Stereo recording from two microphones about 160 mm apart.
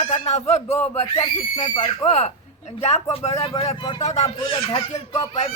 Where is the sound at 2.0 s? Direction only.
45° left (ahead or behind).